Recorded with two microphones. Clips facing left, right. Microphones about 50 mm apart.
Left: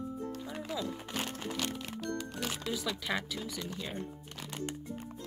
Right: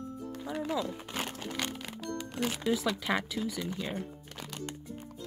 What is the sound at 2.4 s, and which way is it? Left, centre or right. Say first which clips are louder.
Speech: right 7 dB; centre.